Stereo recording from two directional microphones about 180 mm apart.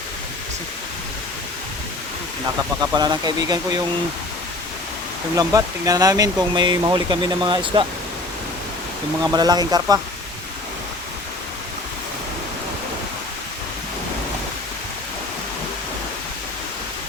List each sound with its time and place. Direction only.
2.9 s speech: 25° right (ahead or behind)
5.4 s speech: 20° right (ahead or behind)
9.2 s speech: 20° right (ahead or behind)